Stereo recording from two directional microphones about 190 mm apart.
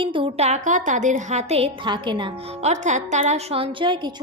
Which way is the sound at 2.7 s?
40° right (ahead or behind).